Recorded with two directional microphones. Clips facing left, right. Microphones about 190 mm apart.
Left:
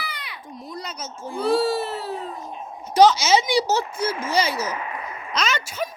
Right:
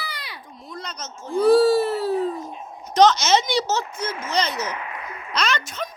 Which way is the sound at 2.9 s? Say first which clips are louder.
Left 1 dB; 10° left (ahead or behind).